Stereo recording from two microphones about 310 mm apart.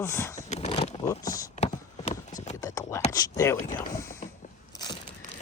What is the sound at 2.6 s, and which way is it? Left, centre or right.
Speech, centre.